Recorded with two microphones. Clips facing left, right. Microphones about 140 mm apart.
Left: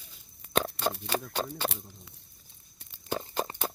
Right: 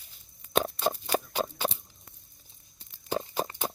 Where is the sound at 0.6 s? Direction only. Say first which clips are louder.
Right 2 dB; 15° right (ahead or behind).